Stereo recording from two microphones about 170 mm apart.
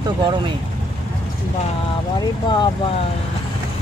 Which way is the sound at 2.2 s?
25° left (ahead or behind).